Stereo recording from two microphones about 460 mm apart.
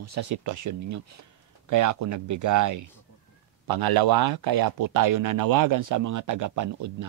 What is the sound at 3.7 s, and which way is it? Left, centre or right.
Speech, right.